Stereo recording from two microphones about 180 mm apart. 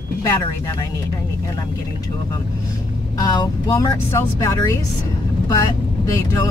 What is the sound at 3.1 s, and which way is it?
Speech, 20° left (ahead or behind).